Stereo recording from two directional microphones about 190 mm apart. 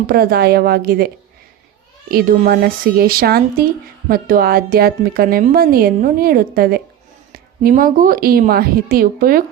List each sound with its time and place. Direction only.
0.1 s a woman's voice: 55° right (ahead or behind)